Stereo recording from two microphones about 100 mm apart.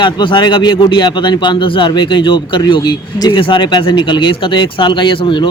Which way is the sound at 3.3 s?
55° left (ahead or behind).